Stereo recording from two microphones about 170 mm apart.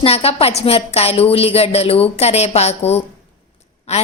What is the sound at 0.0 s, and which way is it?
A woman's voice, 35° left (ahead or behind).